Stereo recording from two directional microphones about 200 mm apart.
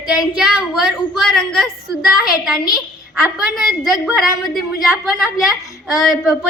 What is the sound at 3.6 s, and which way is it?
A woman's voice, centre (ahead or behind).